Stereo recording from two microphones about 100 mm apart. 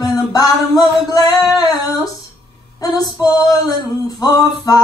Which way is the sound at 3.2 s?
40° left (ahead or behind).